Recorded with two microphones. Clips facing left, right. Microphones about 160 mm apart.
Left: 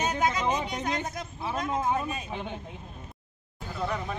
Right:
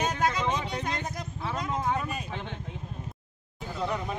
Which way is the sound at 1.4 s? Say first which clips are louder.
Left 2 dB; 15° left (ahead or behind).